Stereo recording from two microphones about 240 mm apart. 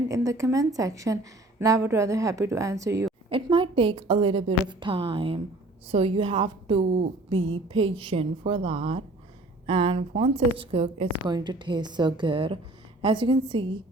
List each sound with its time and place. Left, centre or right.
0.1 s a woman's voice: centre